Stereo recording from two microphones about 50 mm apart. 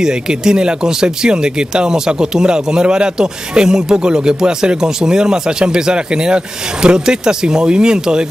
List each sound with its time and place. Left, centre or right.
0.0 s speech: centre